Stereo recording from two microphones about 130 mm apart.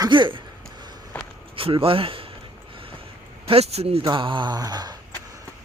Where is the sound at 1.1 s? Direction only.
10° left (ahead or behind).